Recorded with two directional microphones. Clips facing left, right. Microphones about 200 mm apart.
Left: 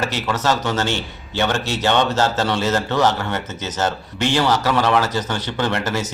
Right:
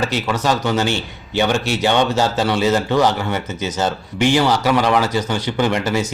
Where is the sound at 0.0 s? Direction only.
15° right (ahead or behind).